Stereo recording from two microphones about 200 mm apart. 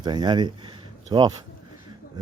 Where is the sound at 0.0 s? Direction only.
20° right (ahead or behind).